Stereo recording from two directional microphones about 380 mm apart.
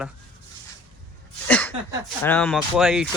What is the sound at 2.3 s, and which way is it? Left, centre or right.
Speech, centre.